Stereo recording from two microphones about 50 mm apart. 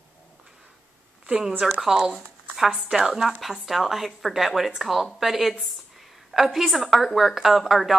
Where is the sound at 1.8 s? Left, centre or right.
Centre.